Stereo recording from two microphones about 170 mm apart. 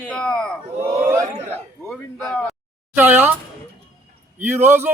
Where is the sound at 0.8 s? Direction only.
15° right (ahead or behind).